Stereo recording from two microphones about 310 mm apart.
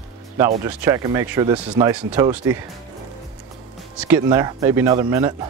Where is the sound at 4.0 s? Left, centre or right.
Centre.